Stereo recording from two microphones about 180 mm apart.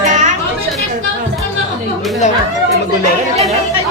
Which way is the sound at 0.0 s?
45° right (ahead or behind).